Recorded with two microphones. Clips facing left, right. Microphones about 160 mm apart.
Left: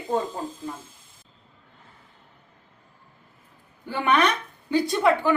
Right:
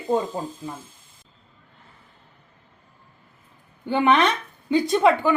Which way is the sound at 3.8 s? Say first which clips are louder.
Right 3 dB; 25° right (ahead or behind).